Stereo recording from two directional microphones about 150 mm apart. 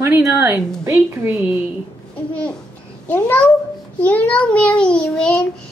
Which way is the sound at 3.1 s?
10° left (ahead or behind).